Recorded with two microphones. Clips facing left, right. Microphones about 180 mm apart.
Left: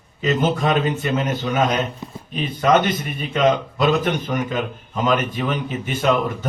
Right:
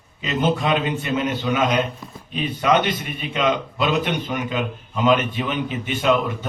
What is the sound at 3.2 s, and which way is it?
A man's voice, 40° left (ahead or behind).